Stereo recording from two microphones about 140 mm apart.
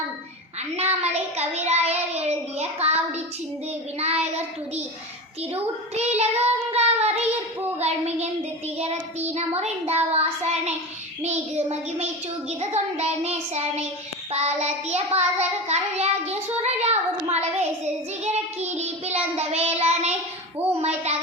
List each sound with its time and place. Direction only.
0.8 s child singing: 50° right (ahead or behind)
5.9 s child singing: 50° right (ahead or behind)
7.8 s speech: 50° right (ahead or behind)
8.8 s child singing: 50° right (ahead or behind)